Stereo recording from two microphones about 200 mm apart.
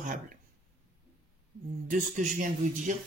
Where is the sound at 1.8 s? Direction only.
40° right (ahead or behind).